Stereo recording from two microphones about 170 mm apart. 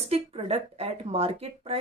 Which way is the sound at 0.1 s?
35° right (ahead or behind).